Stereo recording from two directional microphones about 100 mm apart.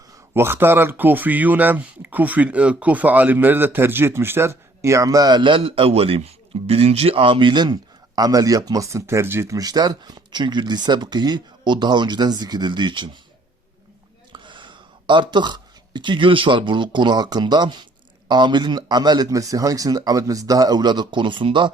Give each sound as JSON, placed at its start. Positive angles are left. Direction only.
{"t": 0.3, "sound": "speech", "side_deg": -25}
{"t": 9.6, "sound": "speech", "side_deg": -40}
{"t": 14.3, "sound": "speech", "side_deg": -50}